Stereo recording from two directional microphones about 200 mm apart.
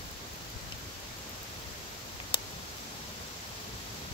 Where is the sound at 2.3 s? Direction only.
25° left (ahead or behind).